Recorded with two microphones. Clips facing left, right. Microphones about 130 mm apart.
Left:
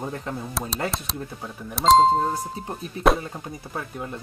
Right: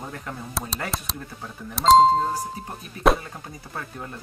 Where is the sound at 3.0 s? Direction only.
Centre (ahead or behind).